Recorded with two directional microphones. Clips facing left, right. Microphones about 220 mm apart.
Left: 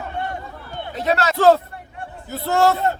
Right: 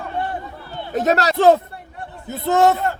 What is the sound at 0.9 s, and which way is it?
Speech, 45° right (ahead or behind).